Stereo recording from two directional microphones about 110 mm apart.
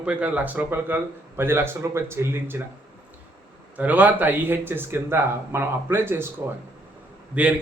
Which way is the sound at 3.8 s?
15° right (ahead or behind).